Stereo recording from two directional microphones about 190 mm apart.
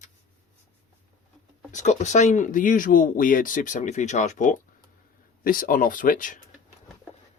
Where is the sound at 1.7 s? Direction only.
40° left (ahead or behind).